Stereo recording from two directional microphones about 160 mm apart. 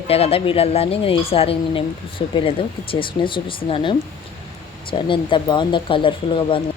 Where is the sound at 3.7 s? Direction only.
30° left (ahead or behind).